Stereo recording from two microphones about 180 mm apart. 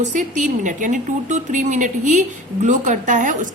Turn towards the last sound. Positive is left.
turn(degrees=-45)  # may be behind; listen again after turning